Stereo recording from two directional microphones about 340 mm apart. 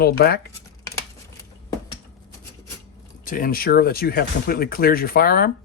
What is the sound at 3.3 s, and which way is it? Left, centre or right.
Speech, left.